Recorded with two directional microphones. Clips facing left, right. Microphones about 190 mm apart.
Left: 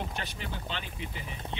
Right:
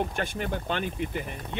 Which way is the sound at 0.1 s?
50° right (ahead or behind).